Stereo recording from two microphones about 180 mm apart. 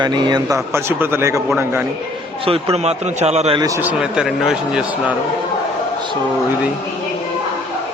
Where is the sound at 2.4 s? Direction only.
35° right (ahead or behind).